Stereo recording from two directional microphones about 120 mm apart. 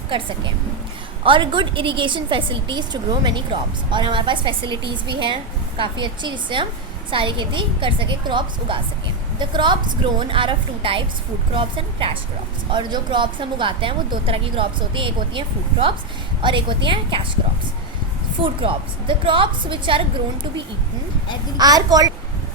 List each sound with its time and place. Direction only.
0.1 s a woman's voice: 40° right (ahead or behind)
18.4 s speech: 45° right (ahead or behind)
21.6 s a woman's voice: 30° right (ahead or behind)